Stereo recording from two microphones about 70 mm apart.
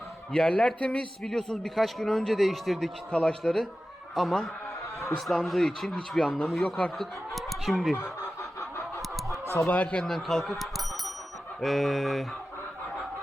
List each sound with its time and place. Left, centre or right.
0.3 s a man's voice: centre
3.1 s a man's voice: centre
6.7 s speech: centre
7.0 s speech: centre
9.6 s speech: left; by 12.2 s centre